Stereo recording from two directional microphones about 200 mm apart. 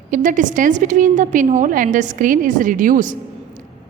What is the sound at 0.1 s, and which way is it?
A woman's voice, 40° right (ahead or behind).